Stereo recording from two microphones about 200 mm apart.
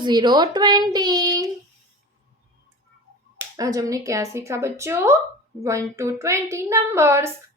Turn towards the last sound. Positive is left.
turn(degrees=-15)  # may be behind; listen again after turning